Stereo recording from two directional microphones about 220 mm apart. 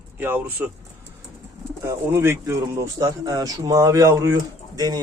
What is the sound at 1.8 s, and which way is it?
Speech, 10° right (ahead or behind).